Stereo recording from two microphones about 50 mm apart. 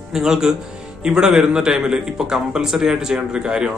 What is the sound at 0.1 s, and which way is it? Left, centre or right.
A man's voice, centre.